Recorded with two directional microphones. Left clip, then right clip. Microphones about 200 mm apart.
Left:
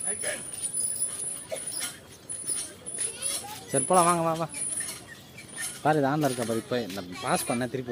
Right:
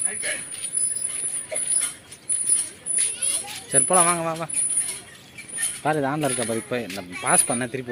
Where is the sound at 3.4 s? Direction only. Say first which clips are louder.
Right 3 dB; 15° left (ahead or behind).